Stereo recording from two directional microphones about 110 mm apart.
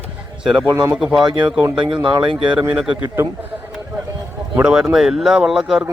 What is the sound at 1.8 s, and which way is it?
Speech, 50° right (ahead or behind).